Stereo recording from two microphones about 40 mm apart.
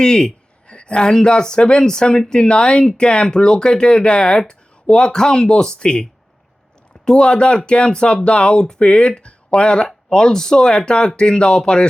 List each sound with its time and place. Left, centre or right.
0.0 s speech: centre